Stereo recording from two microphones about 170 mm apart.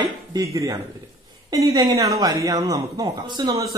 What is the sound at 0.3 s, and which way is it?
A man's voice, 20° right (ahead or behind).